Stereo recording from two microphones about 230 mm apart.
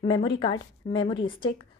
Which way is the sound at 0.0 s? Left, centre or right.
Centre.